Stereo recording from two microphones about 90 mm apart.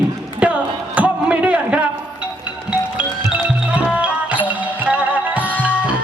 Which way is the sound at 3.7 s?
15° right (ahead or behind).